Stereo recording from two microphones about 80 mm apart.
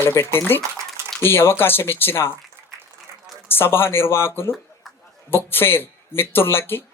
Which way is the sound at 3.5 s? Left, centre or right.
Left.